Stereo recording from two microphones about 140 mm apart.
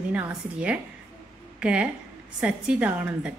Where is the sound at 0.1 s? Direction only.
10° right (ahead or behind).